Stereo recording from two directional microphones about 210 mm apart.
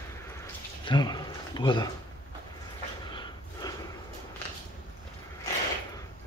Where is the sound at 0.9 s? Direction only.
20° left (ahead or behind).